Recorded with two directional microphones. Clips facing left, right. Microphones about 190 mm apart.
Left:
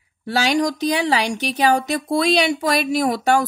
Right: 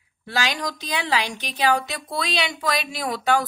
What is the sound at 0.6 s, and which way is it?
Speech, 45° left (ahead or behind).